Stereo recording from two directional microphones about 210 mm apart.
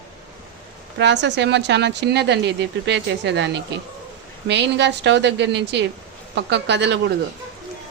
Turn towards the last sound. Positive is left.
turn(degrees=-55)  # may be behind; listen again after turning